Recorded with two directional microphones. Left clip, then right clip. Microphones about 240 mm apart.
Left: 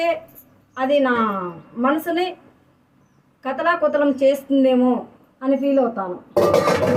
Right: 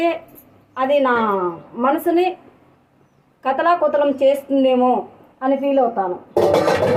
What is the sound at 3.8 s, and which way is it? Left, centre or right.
Speech, centre.